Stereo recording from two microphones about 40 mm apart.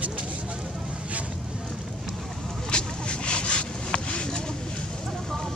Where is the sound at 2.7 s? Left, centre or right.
Left.